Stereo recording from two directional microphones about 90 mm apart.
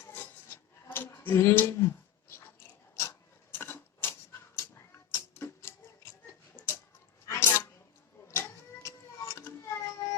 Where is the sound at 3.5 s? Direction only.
25° left (ahead or behind).